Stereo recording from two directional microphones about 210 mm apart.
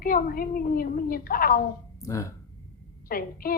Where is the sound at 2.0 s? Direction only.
15° left (ahead or behind).